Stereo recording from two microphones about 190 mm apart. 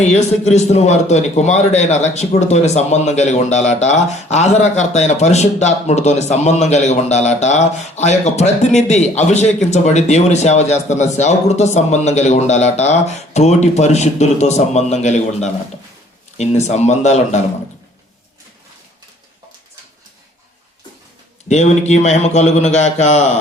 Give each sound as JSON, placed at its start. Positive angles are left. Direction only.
{"t": 0.0, "sound": "a man's voice", "side_deg": 35}
{"t": 21.5, "sound": "a man's voice", "side_deg": 35}